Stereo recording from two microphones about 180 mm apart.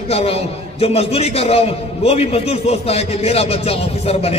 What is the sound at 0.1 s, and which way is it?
A man's voice, 35° left (ahead or behind).